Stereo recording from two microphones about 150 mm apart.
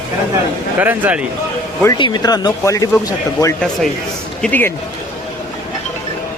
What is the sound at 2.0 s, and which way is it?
Speech, 30° left (ahead or behind).